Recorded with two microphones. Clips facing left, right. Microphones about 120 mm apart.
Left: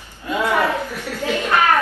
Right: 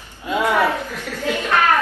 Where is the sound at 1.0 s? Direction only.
15° left (ahead or behind).